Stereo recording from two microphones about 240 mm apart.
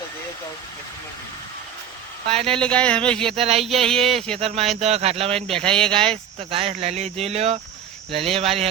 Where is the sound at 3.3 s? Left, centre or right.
Right.